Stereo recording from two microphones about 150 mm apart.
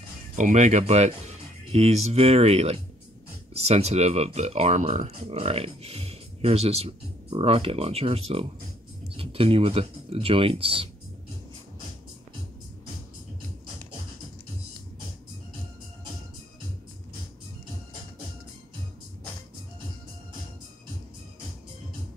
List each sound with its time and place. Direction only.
0.4 s speech: 55° right (ahead or behind); by 10.9 s 40° right (ahead or behind)